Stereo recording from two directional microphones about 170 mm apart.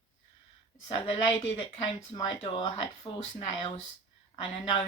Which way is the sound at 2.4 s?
35° left (ahead or behind).